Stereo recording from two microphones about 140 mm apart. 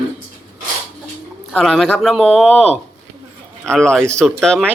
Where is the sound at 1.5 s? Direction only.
Centre (ahead or behind).